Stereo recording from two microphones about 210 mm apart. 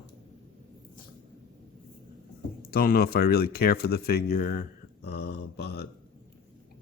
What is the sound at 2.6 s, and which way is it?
Speech, 45° left (ahead or behind).